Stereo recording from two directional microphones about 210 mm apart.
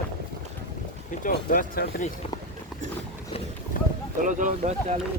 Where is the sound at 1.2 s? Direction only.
40° left (ahead or behind).